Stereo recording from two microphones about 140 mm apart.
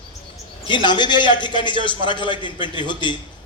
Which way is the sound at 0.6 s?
35° left (ahead or behind).